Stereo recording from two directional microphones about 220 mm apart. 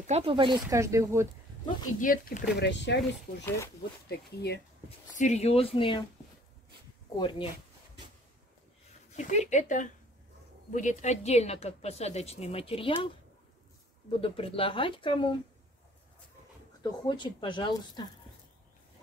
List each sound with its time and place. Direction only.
0.0 s speech: 30° right (ahead or behind); by 1.3 s 15° right (ahead or behind)
2.0 s speech: 35° left (ahead or behind); by 3.4 s 55° left (ahead or behind)
3.4 s speech: 15° left (ahead or behind)
4.1 s speech: 50° left (ahead or behind)
5.1 s a woman's voice: 30° left (ahead or behind)
7.2 s a woman's voice: 20° left (ahead or behind)
9.1 s a woman's voice: 35° left (ahead or behind)
14.2 s a woman's voice: 25° left (ahead or behind)
16.8 s a woman's voice: 20° left (ahead or behind)